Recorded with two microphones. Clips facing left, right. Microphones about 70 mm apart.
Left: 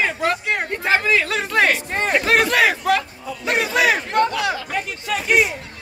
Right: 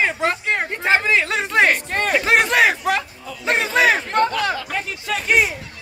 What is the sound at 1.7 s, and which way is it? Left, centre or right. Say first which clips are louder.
Speech: right 1 dB; right.